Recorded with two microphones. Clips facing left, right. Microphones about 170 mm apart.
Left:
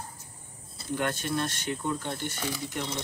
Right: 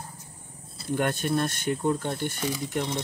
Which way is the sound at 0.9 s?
55° right (ahead or behind).